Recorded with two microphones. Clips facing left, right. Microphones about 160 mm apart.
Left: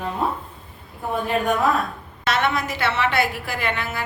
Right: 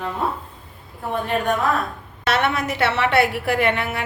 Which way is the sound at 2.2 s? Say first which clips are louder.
Right 1 dB; 65° right (ahead or behind).